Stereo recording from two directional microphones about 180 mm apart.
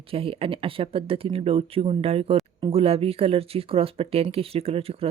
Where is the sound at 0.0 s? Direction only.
30° right (ahead or behind).